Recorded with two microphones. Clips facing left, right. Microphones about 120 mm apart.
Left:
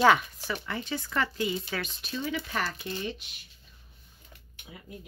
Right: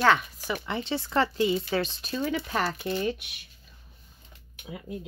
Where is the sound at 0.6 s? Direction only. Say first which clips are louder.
Right 4 dB; 25° right (ahead or behind).